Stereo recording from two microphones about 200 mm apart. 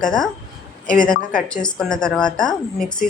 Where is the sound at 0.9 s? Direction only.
40° left (ahead or behind).